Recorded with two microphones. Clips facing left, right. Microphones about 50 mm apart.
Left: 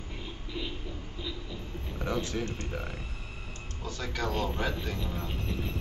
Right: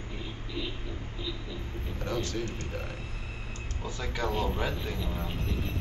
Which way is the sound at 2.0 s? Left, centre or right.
Centre.